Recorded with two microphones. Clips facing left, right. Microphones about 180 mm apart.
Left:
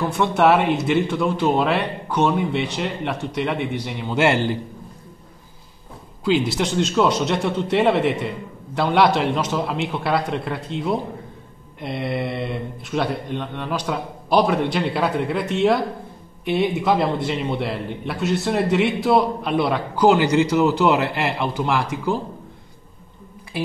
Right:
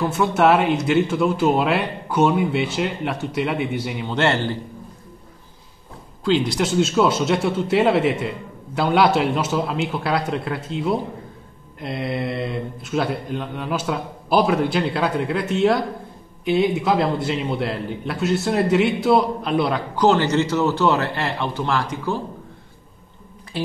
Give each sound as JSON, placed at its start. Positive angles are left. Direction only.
{"t": 0.0, "sound": "a man's voice", "side_deg": 0}
{"t": 4.1, "sound": "a man's voice", "side_deg": 10}
{"t": 6.2, "sound": "a man's voice", "side_deg": 5}
{"t": 20.1, "sound": "a man's voice", "side_deg": 10}